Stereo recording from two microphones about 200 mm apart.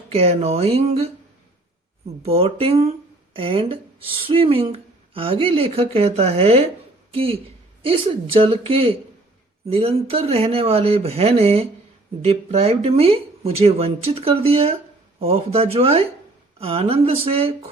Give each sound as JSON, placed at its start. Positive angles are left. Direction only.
{"t": 0.1, "sound": "speech", "side_deg": -30}
{"t": 2.2, "sound": "a woman's voice", "side_deg": -30}